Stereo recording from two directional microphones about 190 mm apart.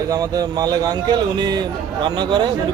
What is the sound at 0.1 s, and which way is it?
Speech, 20° right (ahead or behind).